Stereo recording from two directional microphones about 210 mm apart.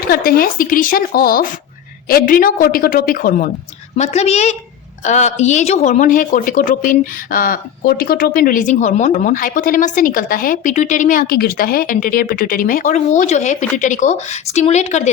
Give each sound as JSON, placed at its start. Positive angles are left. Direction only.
{"t": 0.1, "sound": "a woman's voice", "side_deg": 45}